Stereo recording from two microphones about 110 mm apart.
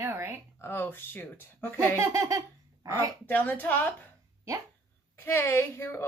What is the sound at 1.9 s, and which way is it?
Speech, 25° right (ahead or behind).